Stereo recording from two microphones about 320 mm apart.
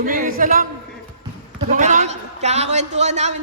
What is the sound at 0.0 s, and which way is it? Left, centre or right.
A man's voice, right.